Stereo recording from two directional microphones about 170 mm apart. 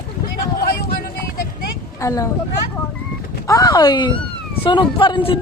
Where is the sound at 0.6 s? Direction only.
60° left (ahead or behind).